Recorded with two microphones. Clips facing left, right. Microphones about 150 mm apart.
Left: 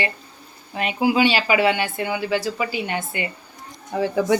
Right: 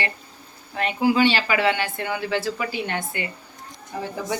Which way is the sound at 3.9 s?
60° left (ahead or behind).